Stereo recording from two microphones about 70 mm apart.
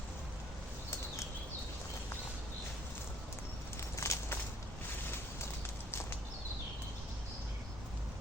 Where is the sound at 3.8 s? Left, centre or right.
Left.